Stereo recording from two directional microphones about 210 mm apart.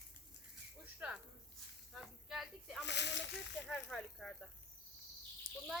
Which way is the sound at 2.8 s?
55° left (ahead or behind).